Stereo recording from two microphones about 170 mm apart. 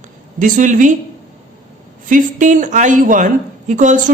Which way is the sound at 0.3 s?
50° right (ahead or behind).